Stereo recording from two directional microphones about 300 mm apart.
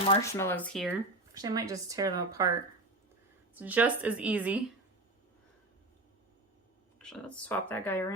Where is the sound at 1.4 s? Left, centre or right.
Centre.